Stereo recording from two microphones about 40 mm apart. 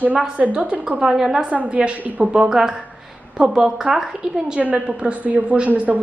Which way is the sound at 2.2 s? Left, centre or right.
Right.